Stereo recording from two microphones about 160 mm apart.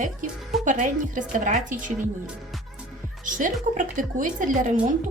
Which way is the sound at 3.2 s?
55° right (ahead or behind).